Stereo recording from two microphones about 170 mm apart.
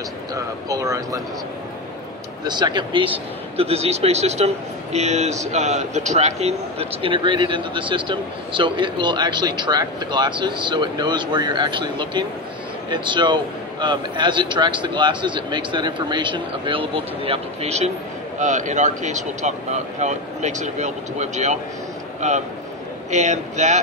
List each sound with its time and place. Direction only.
0.3 s speech: 20° right (ahead or behind)
2.4 s speech: 25° right (ahead or behind); by 23.8 s 45° right (ahead or behind)